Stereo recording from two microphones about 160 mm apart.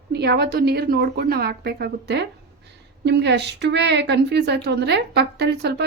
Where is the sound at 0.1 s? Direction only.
90° right.